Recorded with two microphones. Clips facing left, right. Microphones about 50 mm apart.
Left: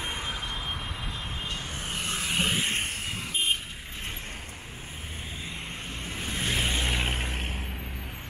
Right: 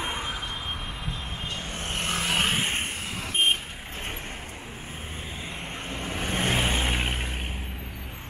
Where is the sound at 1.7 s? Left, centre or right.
Right.